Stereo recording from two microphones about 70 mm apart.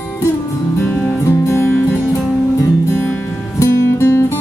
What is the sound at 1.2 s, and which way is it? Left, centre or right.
Music, left.